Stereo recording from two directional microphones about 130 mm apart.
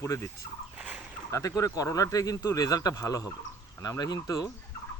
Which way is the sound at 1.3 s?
25° left (ahead or behind).